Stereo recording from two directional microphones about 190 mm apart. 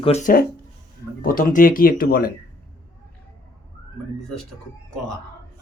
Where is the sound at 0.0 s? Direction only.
35° left (ahead or behind).